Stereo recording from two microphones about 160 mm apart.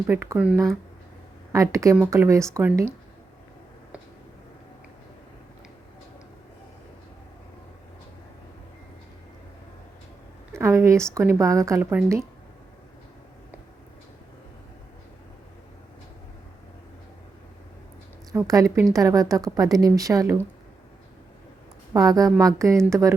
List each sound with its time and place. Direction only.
0.1 s a woman's voice: 20° right (ahead or behind)
0.3 s a woman's voice: 5° right (ahead or behind)
1.5 s a woman's voice: 20° right (ahead or behind)
10.5 s a woman's voice: 15° right (ahead or behind)
18.4 s a woman's voice: 20° right (ahead or behind)
21.9 s a woman's voice: 20° right (ahead or behind)